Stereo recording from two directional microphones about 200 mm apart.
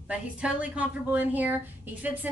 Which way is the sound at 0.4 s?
5° right (ahead or behind).